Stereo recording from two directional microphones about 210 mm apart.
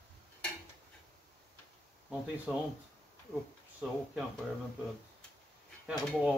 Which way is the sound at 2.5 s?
5° right (ahead or behind).